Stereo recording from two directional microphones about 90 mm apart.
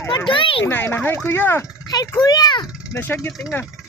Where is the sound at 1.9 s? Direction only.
45° left (ahead or behind).